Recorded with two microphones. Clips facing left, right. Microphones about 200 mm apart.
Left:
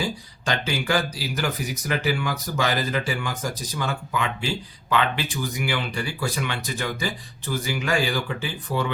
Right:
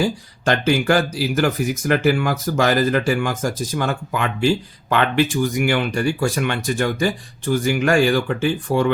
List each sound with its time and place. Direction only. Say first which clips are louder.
0.0 s speech: right 8 dB; 50° right (ahead or behind)